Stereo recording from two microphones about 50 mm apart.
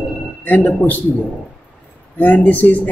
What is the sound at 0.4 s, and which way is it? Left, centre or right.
Speech, left.